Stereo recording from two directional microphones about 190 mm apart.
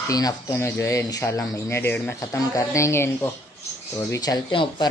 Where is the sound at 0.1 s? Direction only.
20° left (ahead or behind).